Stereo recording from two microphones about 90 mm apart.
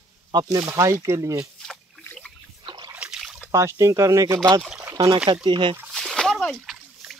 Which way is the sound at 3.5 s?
35° right (ahead or behind).